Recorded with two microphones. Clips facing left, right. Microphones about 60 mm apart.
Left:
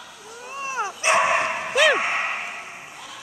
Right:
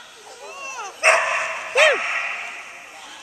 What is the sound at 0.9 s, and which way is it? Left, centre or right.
Dog, right.